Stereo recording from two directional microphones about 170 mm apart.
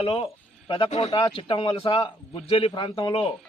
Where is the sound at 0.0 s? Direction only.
30° left (ahead or behind).